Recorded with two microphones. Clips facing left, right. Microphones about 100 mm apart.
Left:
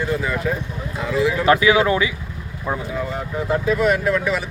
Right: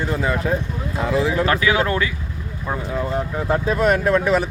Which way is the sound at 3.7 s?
40° right (ahead or behind).